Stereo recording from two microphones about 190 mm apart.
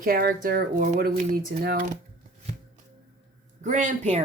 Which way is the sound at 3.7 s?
40° right (ahead or behind).